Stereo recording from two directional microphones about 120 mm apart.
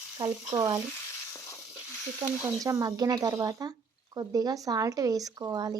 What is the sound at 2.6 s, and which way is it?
Speech, 30° right (ahead or behind).